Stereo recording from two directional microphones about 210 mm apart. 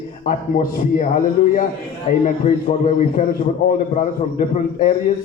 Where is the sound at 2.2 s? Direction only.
35° left (ahead or behind).